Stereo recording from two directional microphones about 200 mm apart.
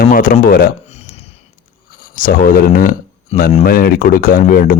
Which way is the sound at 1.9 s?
45° left (ahead or behind).